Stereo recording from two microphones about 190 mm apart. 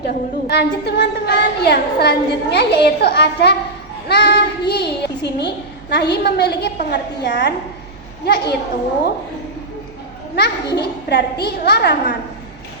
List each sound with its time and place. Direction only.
0.1 s a child's voice: 60° left (ahead or behind)
10.3 s a child's voice: 60° left (ahead or behind)